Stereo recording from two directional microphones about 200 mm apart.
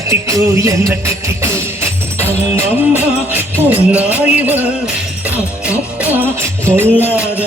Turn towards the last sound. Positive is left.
turn(degrees=-10)  # may be behind; listen again after turning